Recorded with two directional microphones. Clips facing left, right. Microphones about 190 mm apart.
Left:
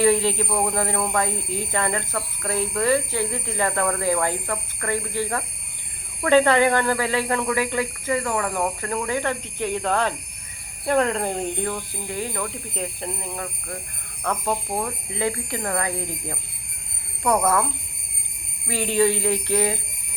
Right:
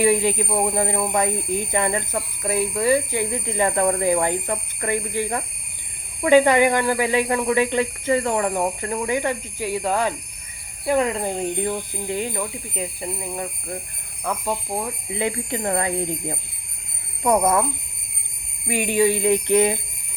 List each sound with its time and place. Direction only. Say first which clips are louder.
0.0 s speech: right 1 dB; 15° right (ahead or behind)
11.6 s speech: right 3 dB; 20° right (ahead or behind)
12.7 s speech: right 1 dB; 5° right (ahead or behind)
13.3 s speech: right 3 dB; 20° right (ahead or behind)
14.3 s speech: even; 5° right (ahead or behind)
15.1 s speech: right 2 dB; 20° right (ahead or behind)
18.7 s speech: right 1 dB; 15° right (ahead or behind)